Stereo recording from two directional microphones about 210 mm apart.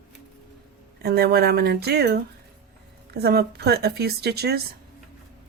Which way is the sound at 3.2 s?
50° right (ahead or behind).